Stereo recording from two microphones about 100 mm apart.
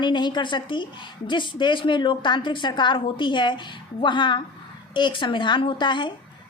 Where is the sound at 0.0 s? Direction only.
50° left (ahead or behind).